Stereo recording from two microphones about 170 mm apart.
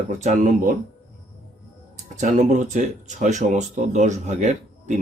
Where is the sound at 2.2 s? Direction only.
45° right (ahead or behind).